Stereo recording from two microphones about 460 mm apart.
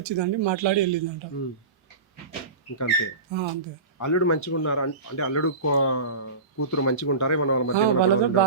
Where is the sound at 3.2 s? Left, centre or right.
Right.